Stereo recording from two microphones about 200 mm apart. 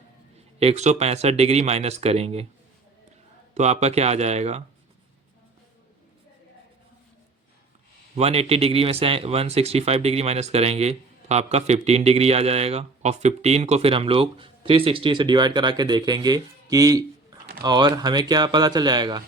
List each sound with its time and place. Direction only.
0.6 s speech: 30° right (ahead or behind)
3.5 s speech: 35° right (ahead or behind)
8.1 s speech: 30° right (ahead or behind)